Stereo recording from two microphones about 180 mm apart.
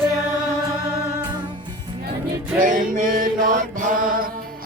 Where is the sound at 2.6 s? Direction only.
50° right (ahead or behind).